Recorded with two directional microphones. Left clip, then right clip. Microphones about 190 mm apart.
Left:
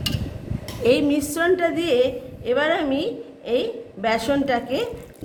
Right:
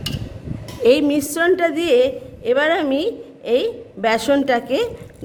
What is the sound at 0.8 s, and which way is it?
A woman's voice, 45° right (ahead or behind).